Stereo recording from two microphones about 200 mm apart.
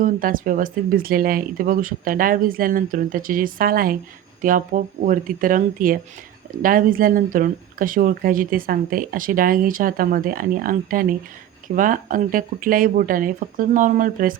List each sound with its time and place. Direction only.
0.0 s speech: 45° right (ahead or behind)